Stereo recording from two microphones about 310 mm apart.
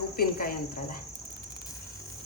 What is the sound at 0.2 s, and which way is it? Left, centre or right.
Speech, left.